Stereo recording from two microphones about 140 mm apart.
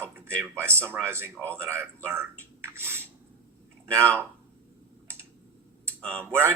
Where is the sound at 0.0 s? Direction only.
20° right (ahead or behind).